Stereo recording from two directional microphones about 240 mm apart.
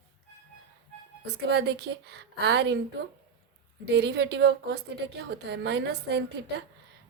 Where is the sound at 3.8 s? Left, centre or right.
Right.